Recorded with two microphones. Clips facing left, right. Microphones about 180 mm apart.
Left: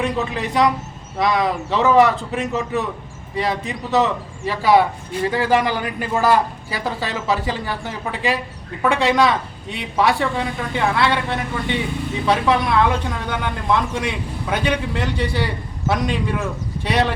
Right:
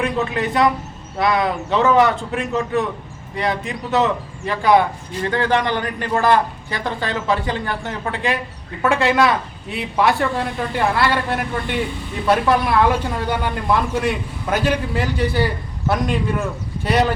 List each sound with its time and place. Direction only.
0.0 s a woman's voice: centre (ahead or behind)